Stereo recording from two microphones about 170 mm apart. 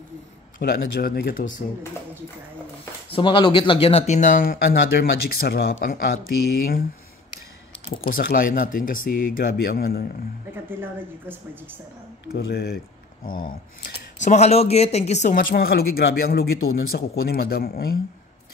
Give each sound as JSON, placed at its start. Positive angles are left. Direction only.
{"t": 0.6, "sound": "speech", "side_deg": 65}
{"t": 3.1, "sound": "speech", "side_deg": 30}
{"t": 4.2, "sound": "speech", "side_deg": 55}
{"t": 8.1, "sound": "speech", "side_deg": 60}
{"t": 10.5, "sound": "speech", "side_deg": -10}
{"t": 12.3, "sound": "speech", "side_deg": 70}
{"t": 15.5, "sound": "speech", "side_deg": 65}